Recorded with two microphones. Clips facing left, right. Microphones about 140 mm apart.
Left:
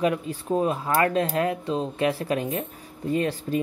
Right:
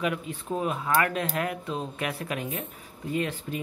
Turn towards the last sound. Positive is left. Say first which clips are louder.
# left 5 dB
turn(degrees=35)  # may be behind; listen again after turning